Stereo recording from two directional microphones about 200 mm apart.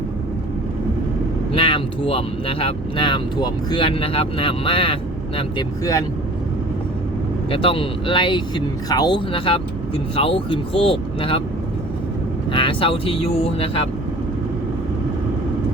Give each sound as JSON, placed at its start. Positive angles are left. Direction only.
{"t": 1.5, "sound": "speech", "side_deg": 25}
{"t": 7.5, "sound": "speech", "side_deg": 25}
{"t": 12.5, "sound": "speech", "side_deg": 25}